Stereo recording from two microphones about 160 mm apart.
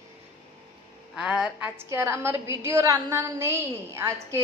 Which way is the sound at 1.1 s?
5° right (ahead or behind).